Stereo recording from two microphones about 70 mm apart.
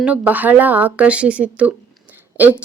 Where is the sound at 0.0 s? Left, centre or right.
Right.